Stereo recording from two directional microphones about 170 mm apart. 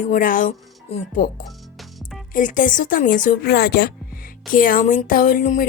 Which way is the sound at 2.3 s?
50° left (ahead or behind).